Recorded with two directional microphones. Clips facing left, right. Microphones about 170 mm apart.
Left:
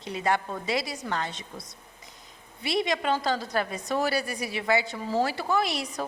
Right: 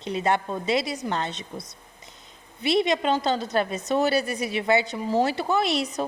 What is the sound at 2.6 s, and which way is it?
A woman's voice, 25° right (ahead or behind).